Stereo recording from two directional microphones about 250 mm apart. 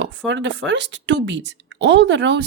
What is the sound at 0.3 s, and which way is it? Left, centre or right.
A woman's voice, right.